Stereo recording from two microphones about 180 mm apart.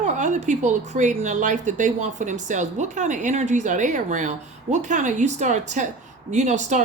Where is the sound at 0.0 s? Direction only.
45° right (ahead or behind).